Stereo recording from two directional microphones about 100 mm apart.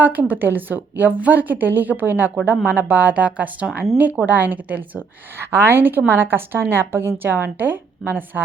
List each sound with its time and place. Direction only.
0.0 s a woman's voice: 15° right (ahead or behind)